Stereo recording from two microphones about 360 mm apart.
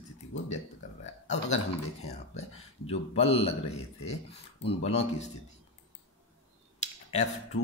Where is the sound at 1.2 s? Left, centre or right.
Centre.